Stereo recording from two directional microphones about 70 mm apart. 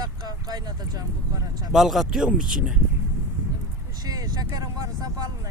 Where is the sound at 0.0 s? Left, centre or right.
Right.